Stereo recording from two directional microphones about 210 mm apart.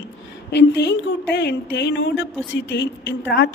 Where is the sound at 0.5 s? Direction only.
55° left (ahead or behind).